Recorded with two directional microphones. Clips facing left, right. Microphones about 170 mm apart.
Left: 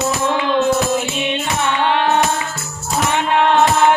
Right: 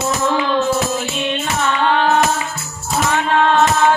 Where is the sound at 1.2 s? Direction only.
20° left (ahead or behind).